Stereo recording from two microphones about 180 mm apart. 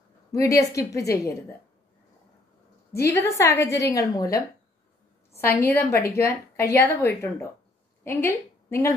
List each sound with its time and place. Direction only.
0.3 s a woman's voice: 15° left (ahead or behind)
2.9 s a woman's voice: 15° left (ahead or behind)
5.6 s a woman's voice: 15° left (ahead or behind)